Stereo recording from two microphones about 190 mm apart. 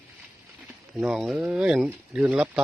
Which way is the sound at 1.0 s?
5° right (ahead or behind).